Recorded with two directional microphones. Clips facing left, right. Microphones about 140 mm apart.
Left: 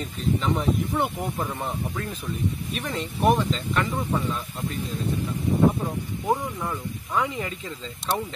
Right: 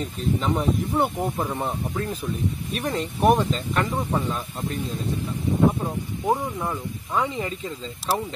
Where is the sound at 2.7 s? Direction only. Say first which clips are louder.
Right 3 dB; 40° right (ahead or behind).